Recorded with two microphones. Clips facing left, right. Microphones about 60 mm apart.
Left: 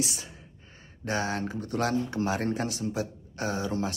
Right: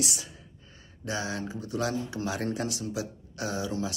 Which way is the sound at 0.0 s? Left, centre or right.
Left.